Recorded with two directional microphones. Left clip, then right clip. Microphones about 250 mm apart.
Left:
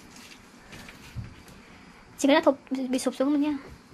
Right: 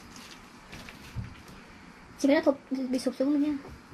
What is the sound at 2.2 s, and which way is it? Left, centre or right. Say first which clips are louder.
Speech: left 3 dB; left.